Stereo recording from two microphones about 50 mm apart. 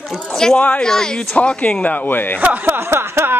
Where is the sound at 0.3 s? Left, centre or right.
Centre; by 2.3 s left.